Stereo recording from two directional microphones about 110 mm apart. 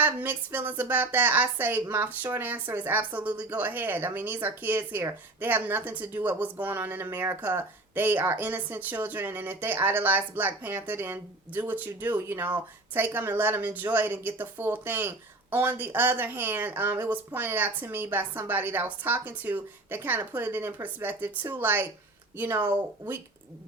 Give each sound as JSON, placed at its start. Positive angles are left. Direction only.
{"t": 0.0, "sound": "speech", "side_deg": -15}